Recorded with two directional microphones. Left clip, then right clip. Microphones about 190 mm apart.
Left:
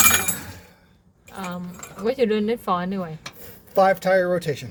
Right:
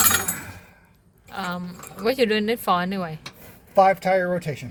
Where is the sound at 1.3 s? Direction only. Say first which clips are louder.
Right 3 dB; 15° right (ahead or behind).